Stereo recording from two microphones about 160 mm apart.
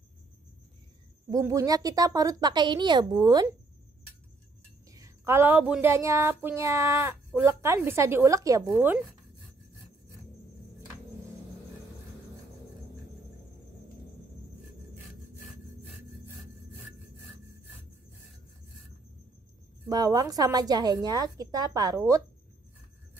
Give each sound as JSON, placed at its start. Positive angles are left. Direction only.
{"t": 1.3, "sound": "a woman's voice", "side_deg": -20}
{"t": 4.9, "sound": "speech", "side_deg": -20}
{"t": 19.9, "sound": "a woman's voice", "side_deg": -25}